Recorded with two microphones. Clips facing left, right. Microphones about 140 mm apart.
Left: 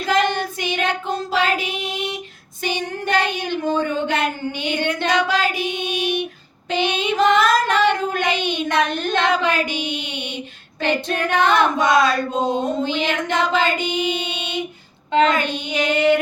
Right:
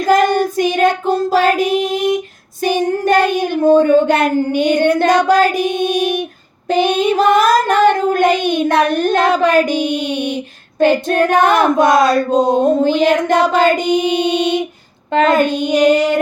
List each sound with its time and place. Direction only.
0.1 s child singing: 45° right (ahead or behind)